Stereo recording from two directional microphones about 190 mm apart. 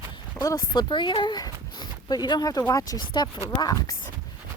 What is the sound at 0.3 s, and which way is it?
A woman's voice, 20° left (ahead or behind).